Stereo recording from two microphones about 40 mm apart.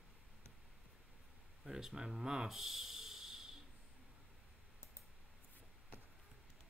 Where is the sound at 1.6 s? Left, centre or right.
Centre.